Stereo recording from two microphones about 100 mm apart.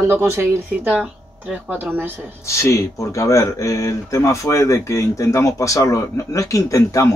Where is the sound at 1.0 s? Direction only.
10° right (ahead or behind).